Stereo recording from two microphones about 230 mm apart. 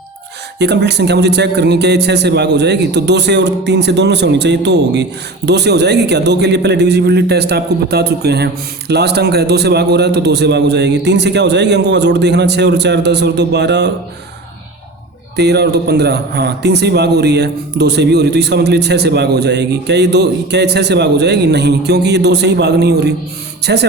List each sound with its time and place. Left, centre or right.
0.6 s a man's voice: right
15.4 s a man's voice: right